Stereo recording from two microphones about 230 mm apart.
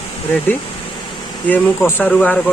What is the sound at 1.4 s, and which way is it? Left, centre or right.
Speech, centre.